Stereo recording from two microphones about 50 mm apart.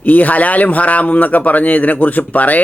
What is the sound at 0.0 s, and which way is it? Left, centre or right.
A man's voice, left.